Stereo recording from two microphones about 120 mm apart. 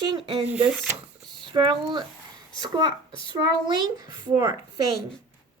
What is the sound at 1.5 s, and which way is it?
Speech, 40° right (ahead or behind).